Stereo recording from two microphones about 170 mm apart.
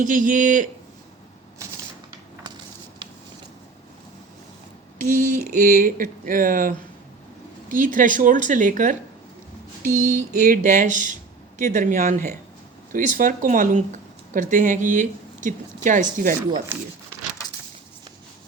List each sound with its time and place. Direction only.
0.0 s speech: 50° right (ahead or behind)
4.9 s speech: 55° right (ahead or behind)
9.8 s mantra: 50° right (ahead or behind)
10.2 s speech: 50° right (ahead or behind)